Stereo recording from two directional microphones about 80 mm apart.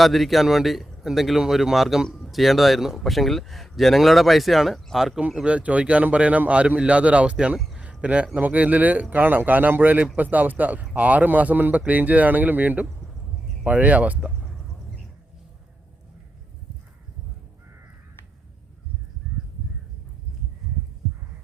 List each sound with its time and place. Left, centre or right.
0.0 s a man's voice: centre
7.8 s a sound: centre
8.3 s a man's voice: right